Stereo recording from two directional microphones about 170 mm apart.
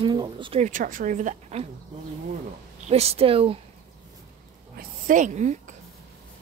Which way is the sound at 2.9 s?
35° right (ahead or behind).